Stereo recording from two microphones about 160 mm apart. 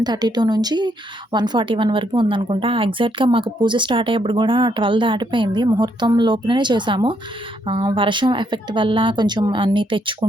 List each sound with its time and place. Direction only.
0.0 s a woman's voice: 25° right (ahead or behind)